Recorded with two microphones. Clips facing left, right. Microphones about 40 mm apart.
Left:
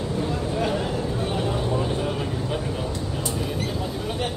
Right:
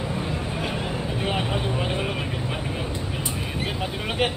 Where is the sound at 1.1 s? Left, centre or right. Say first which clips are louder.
Even; right.